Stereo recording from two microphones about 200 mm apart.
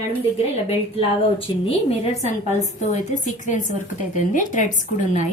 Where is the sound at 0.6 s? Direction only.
30° left (ahead or behind).